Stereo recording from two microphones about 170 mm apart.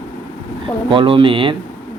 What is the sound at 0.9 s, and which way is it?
Speech, 30° right (ahead or behind).